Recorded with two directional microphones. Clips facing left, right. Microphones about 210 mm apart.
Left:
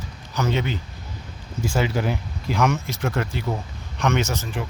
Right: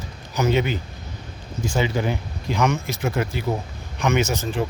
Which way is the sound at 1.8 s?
5° left (ahead or behind).